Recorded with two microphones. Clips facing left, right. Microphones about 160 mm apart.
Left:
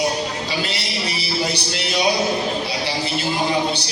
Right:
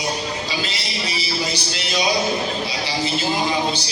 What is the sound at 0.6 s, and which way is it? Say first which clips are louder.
Music: left 2 dB; 65° left (ahead or behind).